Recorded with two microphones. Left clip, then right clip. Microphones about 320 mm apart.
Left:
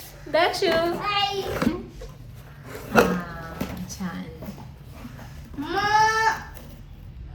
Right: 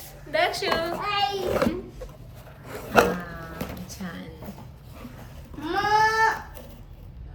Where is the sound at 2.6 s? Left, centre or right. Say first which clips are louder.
Even; centre.